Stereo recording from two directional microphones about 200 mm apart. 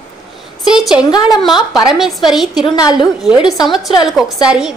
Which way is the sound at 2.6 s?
20° left (ahead or behind).